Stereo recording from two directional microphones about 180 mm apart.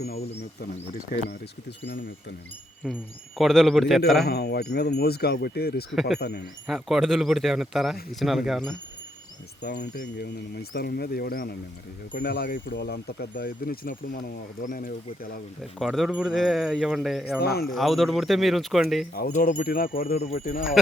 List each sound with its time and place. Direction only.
2.9 s speech: centre (ahead or behind)
4.3 s speech: 65° left (ahead or behind)
5.9 s speech: centre (ahead or behind)
6.1 s speech: 65° left (ahead or behind)
6.7 s speech: centre (ahead or behind)
9.6 s speech: 70° left (ahead or behind); by 15.4 s 55° left (ahead or behind)
15.8 s speech: centre (ahead or behind)
17.4 s speech: 60° left (ahead or behind)
17.7 s speech: centre (ahead or behind)
19.1 s speech: 55° left (ahead or behind)
20.1 s speech: 40° left (ahead or behind)